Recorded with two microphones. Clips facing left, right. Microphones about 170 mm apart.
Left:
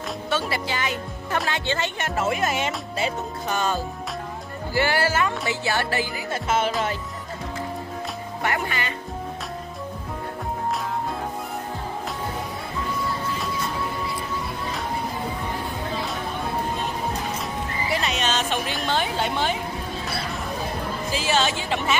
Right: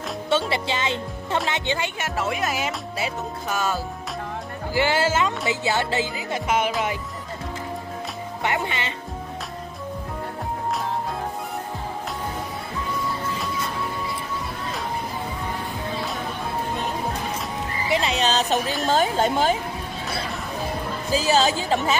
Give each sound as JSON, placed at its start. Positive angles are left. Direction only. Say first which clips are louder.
{"t": 0.3, "sound": "a woman's voice", "louder": "right 4 dB", "side_deg": -25}
{"t": 2.0, "sound": "music", "louder": "left 2 dB", "side_deg": 0}
{"t": 4.7, "sound": "a woman's voice", "louder": "right 1 dB", "side_deg": -20}
{"t": 8.4, "sound": "a woman's voice", "louder": "right 1 dB", "side_deg": -20}
{"t": 17.8, "sound": "music", "louder": "right 4 dB", "side_deg": -25}
{"t": 18.2, "sound": "speech", "louder": "right 3 dB", "side_deg": -35}
{"t": 21.1, "sound": "speech", "louder": "right 4 dB", "side_deg": -35}